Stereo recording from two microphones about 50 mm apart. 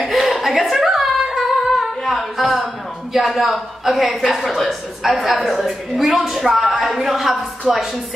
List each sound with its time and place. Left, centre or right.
0.1 s singing: centre
2.6 s a woman's voice: centre
4.2 s a woman's voice: centre